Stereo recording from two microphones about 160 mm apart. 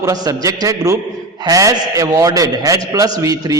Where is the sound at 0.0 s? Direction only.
20° right (ahead or behind).